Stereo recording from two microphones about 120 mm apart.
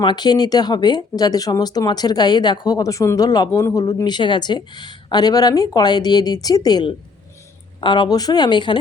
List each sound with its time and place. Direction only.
0.0 s speech: 40° left (ahead or behind)